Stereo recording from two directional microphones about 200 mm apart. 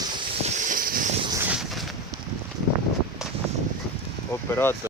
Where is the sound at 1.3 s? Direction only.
5° right (ahead or behind).